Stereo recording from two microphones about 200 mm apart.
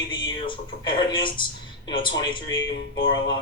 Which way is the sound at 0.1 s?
25° left (ahead or behind).